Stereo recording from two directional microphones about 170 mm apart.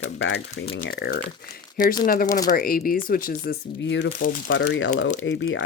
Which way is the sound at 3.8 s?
90° left.